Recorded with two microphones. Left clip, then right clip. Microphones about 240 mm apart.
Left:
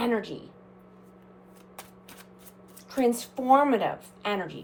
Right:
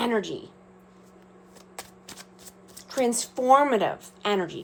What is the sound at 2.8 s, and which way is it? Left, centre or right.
Speech, right.